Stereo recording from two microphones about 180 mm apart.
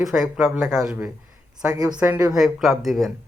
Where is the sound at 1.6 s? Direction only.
10° right (ahead or behind).